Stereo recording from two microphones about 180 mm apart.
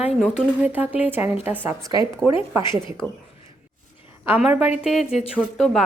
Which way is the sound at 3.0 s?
10° left (ahead or behind).